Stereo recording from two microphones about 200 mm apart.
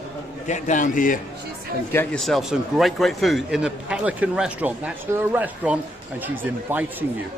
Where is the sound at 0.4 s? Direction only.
35° left (ahead or behind).